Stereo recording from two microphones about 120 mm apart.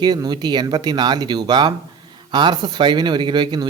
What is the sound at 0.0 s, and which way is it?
Speech, 35° right (ahead or behind).